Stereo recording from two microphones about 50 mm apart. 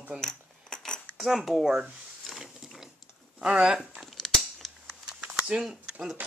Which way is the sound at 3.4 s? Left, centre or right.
Centre.